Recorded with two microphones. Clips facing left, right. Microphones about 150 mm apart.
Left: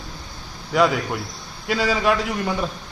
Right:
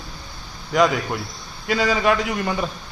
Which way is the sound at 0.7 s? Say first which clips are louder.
Even; centre (ahead or behind).